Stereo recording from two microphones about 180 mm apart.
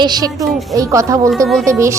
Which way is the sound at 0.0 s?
20° right (ahead or behind).